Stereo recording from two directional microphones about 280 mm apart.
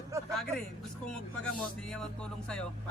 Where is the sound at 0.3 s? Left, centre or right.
Centre.